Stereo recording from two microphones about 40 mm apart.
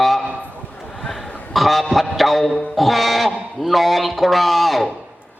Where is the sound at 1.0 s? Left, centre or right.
Centre.